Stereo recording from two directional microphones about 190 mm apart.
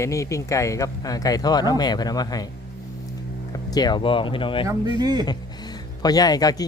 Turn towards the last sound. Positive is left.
turn(degrees=20)  # may be behind; listen again after turning